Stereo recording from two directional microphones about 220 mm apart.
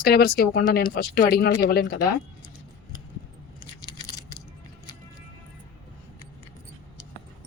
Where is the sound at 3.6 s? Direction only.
20° left (ahead or behind).